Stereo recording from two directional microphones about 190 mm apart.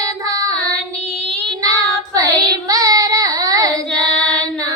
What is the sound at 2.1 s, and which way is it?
Child singing, 20° right (ahead or behind).